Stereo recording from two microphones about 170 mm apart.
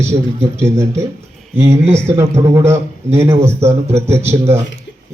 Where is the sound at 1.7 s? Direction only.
40° right (ahead or behind).